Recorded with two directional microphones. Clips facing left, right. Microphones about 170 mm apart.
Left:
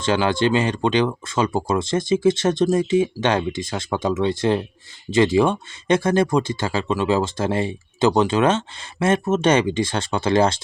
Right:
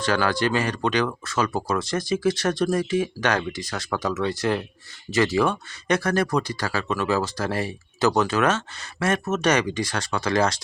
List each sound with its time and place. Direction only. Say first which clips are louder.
0.0 s speech: left 3 dB; 25° left (ahead or behind)